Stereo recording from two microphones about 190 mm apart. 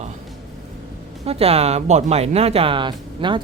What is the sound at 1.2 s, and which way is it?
Speech, 30° right (ahead or behind).